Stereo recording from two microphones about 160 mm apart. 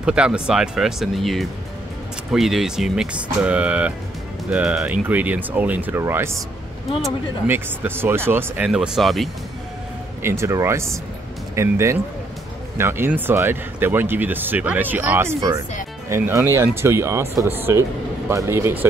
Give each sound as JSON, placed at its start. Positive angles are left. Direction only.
{"t": 0.0, "sound": "speech", "side_deg": -5}
{"t": 7.4, "sound": "speech", "side_deg": -15}
{"t": 10.2, "sound": "speech", "side_deg": -15}